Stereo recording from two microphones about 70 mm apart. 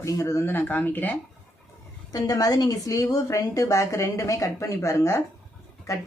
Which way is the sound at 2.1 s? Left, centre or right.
Left.